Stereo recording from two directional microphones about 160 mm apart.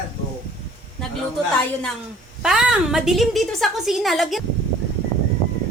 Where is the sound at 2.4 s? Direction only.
5° right (ahead or behind).